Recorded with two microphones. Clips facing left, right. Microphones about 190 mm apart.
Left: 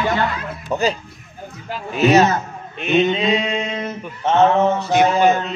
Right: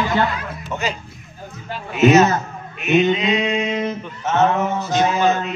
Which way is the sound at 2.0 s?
35° left (ahead or behind).